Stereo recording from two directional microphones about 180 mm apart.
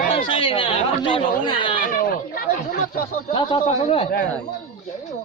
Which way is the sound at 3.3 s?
40° left (ahead or behind).